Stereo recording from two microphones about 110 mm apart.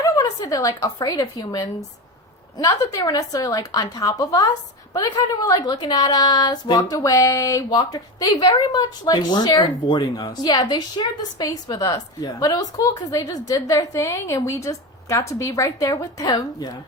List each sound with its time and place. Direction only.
0.0 s a woman's voice: 35° left (ahead or behind)